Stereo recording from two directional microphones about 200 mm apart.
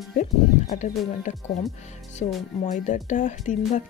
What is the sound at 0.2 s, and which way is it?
Speech, 40° left (ahead or behind).